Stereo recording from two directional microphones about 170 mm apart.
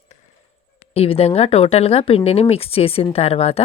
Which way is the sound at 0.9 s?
35° left (ahead or behind).